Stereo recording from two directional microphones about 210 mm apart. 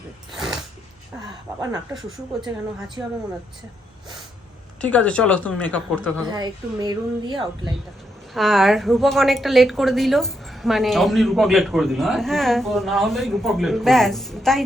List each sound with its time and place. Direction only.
0.3 s a sound: centre (ahead or behind)
1.9 s a woman's voice: centre (ahead or behind)
4.8 s a woman's voice: 5° left (ahead or behind)
6.3 s speech: 20° right (ahead or behind)
8.3 s a woman's voice: centre (ahead or behind)